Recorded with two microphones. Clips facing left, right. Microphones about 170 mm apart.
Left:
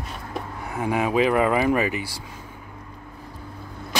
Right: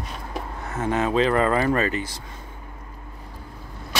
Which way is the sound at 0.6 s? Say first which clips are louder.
Even; 15° left (ahead or behind).